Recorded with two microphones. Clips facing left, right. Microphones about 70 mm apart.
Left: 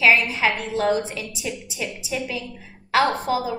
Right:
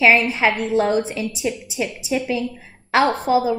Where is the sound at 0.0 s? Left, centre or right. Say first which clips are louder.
Right 3 dB; right.